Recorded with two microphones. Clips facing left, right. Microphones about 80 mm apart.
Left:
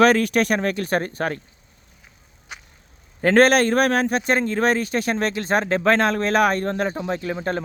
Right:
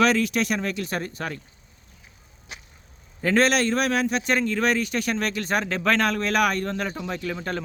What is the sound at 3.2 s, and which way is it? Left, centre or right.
A man's voice, left.